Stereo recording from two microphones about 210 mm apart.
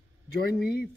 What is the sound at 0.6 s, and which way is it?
Speech, 50° left (ahead or behind).